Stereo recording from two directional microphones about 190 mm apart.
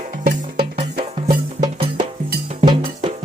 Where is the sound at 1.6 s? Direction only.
25° right (ahead or behind).